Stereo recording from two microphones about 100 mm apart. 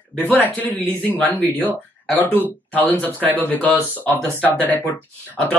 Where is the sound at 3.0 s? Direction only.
15° left (ahead or behind).